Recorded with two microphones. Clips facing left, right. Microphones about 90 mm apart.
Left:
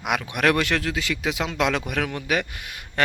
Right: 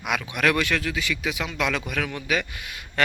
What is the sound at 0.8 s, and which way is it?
Speech, 55° left (ahead or behind).